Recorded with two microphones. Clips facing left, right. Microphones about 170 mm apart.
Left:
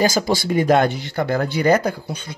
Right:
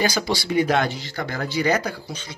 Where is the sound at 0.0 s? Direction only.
45° left (ahead or behind).